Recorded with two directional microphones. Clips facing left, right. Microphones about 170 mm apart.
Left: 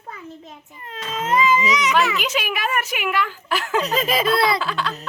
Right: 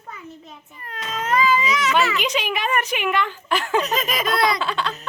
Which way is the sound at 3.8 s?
30° left (ahead or behind).